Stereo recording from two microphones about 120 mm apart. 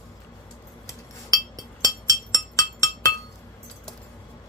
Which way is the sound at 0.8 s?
30° left (ahead or behind).